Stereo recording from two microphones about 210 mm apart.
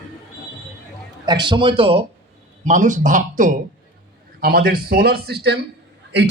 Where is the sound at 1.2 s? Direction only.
20° right (ahead or behind).